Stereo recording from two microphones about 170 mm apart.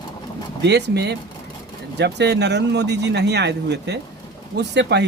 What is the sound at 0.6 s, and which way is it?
Speech, 85° right.